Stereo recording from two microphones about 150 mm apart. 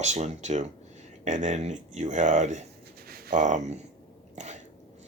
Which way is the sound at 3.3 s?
55° right (ahead or behind).